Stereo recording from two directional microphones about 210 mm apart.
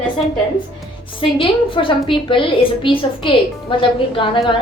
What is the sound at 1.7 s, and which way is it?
A woman's voice, 25° left (ahead or behind).